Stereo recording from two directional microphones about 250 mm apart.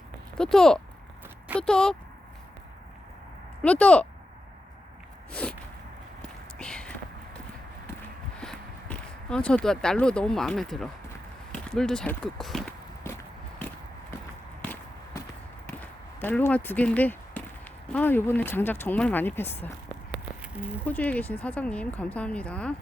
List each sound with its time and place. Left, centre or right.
0.3 s speech: centre
3.6 s speech: centre
5.3 s a sound: centre
6.6 s a sound: centre
8.4 s speech: centre
11.5 s walk: centre
14.6 s walk: centre
16.2 s speech: centre